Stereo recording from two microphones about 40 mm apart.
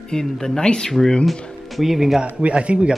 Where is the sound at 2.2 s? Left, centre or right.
Right.